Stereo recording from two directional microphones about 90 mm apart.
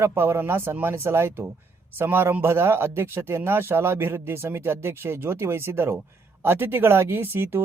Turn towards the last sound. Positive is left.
turn(degrees=-25)  # may be behind; listen again after turning